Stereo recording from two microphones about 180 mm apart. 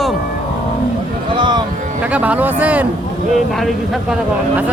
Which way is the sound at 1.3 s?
25° right (ahead or behind).